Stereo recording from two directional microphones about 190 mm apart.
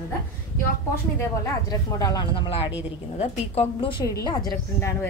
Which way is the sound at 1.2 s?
20° left (ahead or behind).